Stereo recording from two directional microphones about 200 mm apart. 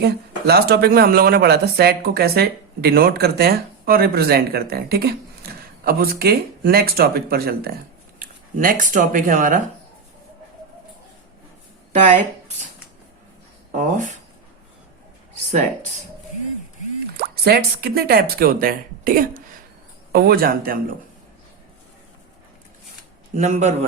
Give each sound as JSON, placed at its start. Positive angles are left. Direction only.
{"t": 0.0, "sound": "speech", "side_deg": -55}
{"t": 13.7, "sound": "speech", "side_deg": -40}
{"t": 15.4, "sound": "speech", "side_deg": -40}
{"t": 17.2, "sound": "speech", "side_deg": -50}
{"t": 23.3, "sound": "speech", "side_deg": -35}